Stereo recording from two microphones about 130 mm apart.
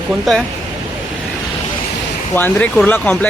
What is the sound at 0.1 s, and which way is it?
Speech, centre (ahead or behind).